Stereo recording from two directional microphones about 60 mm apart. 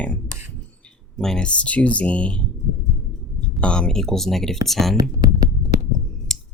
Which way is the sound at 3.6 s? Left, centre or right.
Centre.